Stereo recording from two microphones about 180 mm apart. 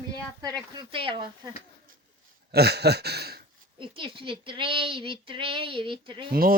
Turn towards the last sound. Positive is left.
turn(degrees=-55)  # may be behind; listen again after turning